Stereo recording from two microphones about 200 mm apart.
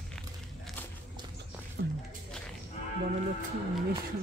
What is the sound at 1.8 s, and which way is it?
Music, 55° right (ahead or behind).